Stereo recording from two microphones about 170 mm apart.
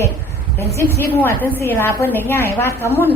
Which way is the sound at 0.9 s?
10° left (ahead or behind).